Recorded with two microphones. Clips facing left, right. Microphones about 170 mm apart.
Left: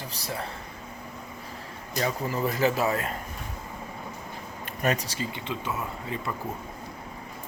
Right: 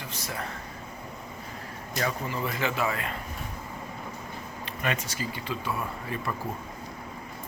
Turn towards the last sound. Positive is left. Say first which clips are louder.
# even
turn(degrees=20)  # may be behind; listen again after turning